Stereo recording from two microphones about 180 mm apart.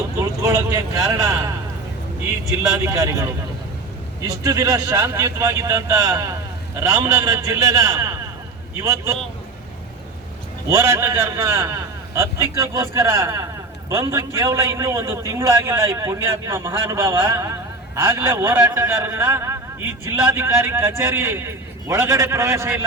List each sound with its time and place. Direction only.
0.2 s speech: 15° right (ahead or behind)
2.7 s a man's voice: 15° right (ahead or behind)
10.7 s a man's voice: 15° right (ahead or behind)